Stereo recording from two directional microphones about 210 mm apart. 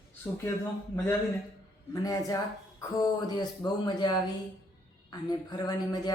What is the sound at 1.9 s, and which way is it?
Speech, 15° left (ahead or behind).